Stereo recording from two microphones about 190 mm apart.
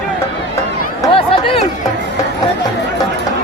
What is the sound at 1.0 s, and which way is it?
Chatter, 30° left (ahead or behind).